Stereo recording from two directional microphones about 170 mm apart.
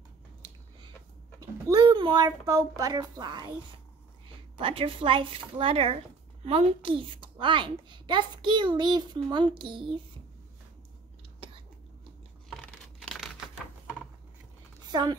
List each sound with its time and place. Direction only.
1.4 s speech: 20° right (ahead or behind)
4.6 s speech: 30° right (ahead or behind)
13.0 s computer keyboard: 5° left (ahead or behind)
14.9 s speech: 25° right (ahead or behind)